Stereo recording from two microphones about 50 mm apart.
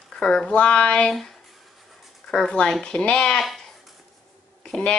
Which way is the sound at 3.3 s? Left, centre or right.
Centre.